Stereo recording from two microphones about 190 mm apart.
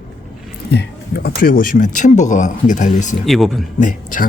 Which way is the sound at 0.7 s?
60° left (ahead or behind).